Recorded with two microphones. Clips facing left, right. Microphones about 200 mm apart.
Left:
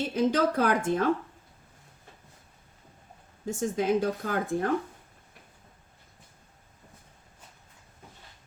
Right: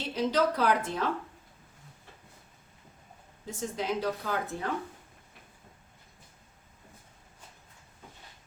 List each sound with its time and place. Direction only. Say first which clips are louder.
0.0 s speech: left 3 dB; 50° left (ahead or behind)
3.4 s speech: left 6 dB; 50° left (ahead or behind)